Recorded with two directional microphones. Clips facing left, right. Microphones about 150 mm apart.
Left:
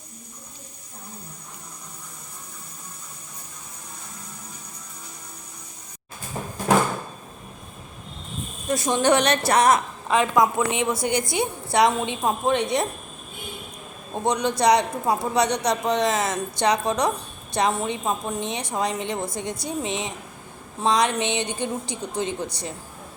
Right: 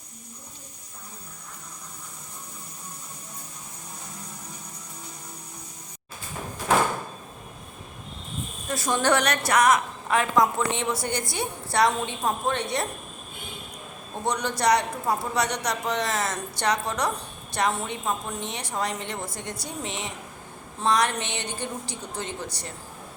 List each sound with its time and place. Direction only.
8.7 s a woman's voice: 20° left (ahead or behind)
10.1 s a woman's voice: 15° left (ahead or behind)
14.3 s a woman's voice: 15° left (ahead or behind)